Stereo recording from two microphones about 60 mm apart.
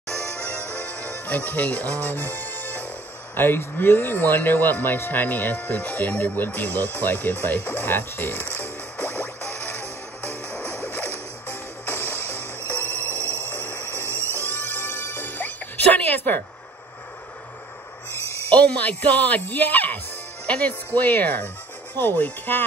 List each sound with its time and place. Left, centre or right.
0.4 s music: left
3.3 s speech: left
9.0 s music: left
13.2 s music: right
13.5 s music: left
18.5 s speech: left